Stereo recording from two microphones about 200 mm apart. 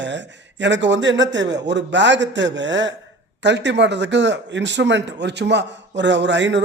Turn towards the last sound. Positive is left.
turn(degrees=-65)  # may be behind; listen again after turning